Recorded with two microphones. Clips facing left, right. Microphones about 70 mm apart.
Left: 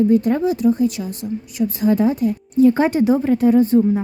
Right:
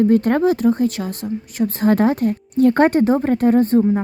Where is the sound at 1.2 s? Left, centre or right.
Right.